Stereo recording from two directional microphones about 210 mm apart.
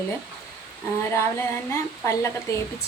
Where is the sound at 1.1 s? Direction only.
10° left (ahead or behind).